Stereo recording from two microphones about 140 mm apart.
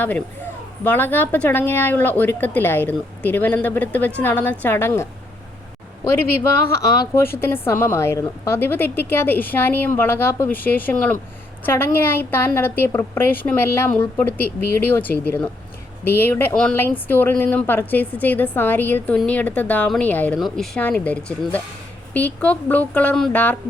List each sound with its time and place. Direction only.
0.9 s a woman's voice: 15° left (ahead or behind)
6.7 s a woman's voice: 25° left (ahead or behind); by 23.4 s 10° left (ahead or behind)